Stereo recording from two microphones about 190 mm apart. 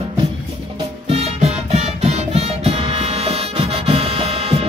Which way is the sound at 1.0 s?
35° right (ahead or behind).